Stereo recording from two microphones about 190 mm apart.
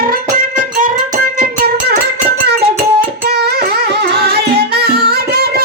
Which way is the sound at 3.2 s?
55° right (ahead or behind).